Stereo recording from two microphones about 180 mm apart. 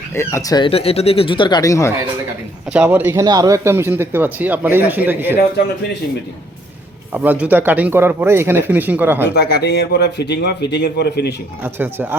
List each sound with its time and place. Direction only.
0.1 s speech: 15° left (ahead or behind)
2.7 s speech: 10° right (ahead or behind)
7.1 s speech: 10° right (ahead or behind)
9.3 s a man's voice: 65° left (ahead or behind)
11.6 s speech: 10° right (ahead or behind)